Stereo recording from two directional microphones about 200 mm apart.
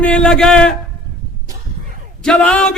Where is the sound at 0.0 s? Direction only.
5° left (ahead or behind).